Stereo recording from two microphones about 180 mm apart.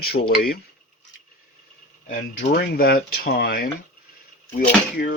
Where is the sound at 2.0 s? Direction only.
50° left (ahead or behind).